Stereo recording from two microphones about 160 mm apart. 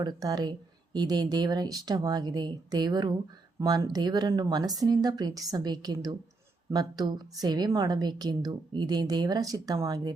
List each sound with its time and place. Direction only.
0.0 s a woman's voice: 25° right (ahead or behind)